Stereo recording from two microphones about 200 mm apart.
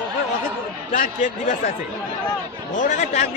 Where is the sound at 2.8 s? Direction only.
40° left (ahead or behind).